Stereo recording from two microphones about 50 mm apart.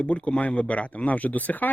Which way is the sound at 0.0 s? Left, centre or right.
Left.